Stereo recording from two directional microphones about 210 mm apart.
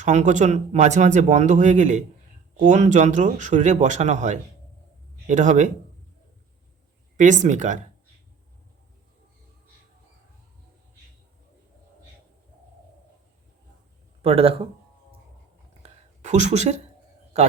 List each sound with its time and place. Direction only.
0.0 s speech: 35° right (ahead or behind)
7.2 s speech: 35° right (ahead or behind)
14.2 s speech: 30° right (ahead or behind)
15.8 s a sound: 35° right (ahead or behind)